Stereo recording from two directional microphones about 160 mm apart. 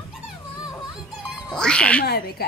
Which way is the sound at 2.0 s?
75° left (ahead or behind).